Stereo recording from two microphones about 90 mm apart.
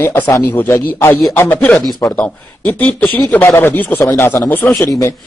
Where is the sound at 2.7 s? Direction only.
20° left (ahead or behind).